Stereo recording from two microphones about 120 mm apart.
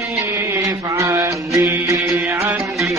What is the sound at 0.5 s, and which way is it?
Mantra, 25° right (ahead or behind).